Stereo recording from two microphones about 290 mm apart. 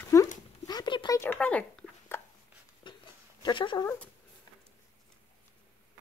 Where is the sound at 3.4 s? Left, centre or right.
Centre.